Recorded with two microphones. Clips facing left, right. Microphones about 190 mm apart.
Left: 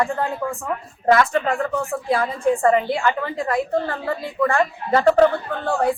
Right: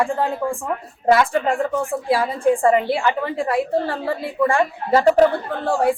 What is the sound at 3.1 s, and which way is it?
Speech, 25° right (ahead or behind).